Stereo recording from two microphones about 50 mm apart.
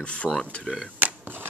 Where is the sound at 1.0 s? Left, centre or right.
Right.